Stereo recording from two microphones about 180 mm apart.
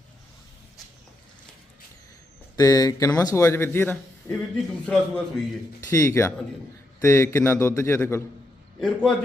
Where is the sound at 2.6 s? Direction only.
20° left (ahead or behind).